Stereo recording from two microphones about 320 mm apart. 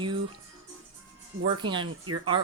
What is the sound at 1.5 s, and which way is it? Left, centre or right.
Speech, centre.